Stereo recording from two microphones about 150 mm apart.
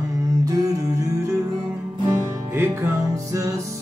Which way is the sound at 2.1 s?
15° right (ahead or behind).